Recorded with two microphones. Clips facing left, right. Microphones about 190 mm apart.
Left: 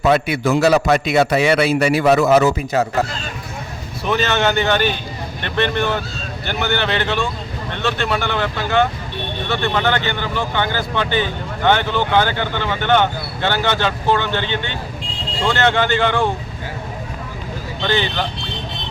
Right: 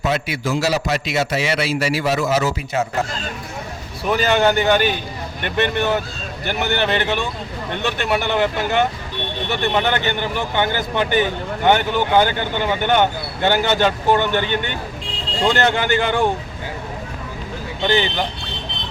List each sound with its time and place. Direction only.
0.1 s a man's voice: 60° left (ahead or behind)
4.1 s speech: 10° right (ahead or behind)
17.8 s speech: 15° right (ahead or behind)